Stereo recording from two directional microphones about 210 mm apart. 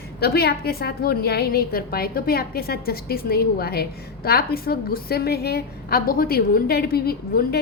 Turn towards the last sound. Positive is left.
turn(degrees=45)  # may be behind; listen again after turning